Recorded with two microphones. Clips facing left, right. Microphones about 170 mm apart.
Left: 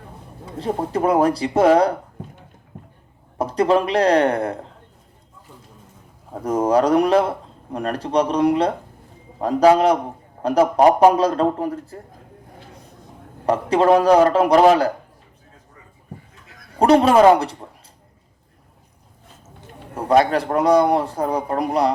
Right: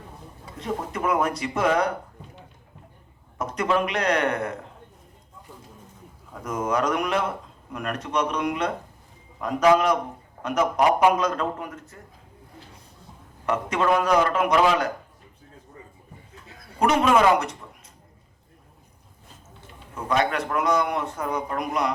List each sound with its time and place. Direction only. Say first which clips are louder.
0.5 s speech: left 7 dB; 30° left (ahead or behind)
3.3 s speech: left 7 dB; 30° left (ahead or behind)
6.3 s speech: left 8 dB; 35° left (ahead or behind)
13.4 s speech: left 7 dB; 35° left (ahead or behind)
16.8 s speech: left 7 dB; 35° left (ahead or behind)
20.0 s speech: left 7 dB; 35° left (ahead or behind)